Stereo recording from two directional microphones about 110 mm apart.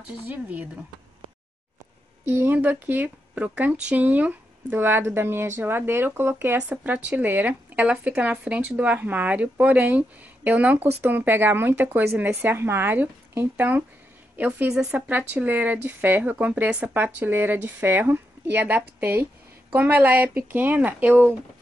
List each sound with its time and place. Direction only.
0.3 s speech: 15° right (ahead or behind)
2.2 s a woman's voice: 20° right (ahead or behind)
14.7 s speech: 5° right (ahead or behind)
15.0 s speech: 15° right (ahead or behind)